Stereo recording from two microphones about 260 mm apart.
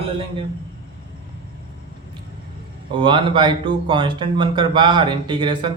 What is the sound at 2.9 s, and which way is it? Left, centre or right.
Speech, centre.